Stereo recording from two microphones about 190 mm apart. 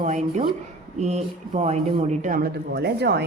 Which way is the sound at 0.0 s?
40° right (ahead or behind).